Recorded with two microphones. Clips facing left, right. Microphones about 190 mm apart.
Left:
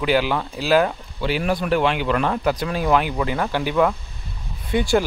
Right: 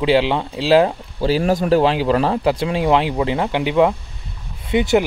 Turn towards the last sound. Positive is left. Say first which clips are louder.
# right 3 dB
turn(degrees=-20)  # may be behind; listen again after turning